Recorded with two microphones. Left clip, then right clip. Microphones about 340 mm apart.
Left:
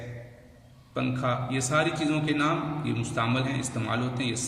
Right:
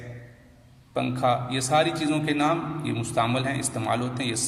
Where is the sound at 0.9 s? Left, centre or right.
Centre.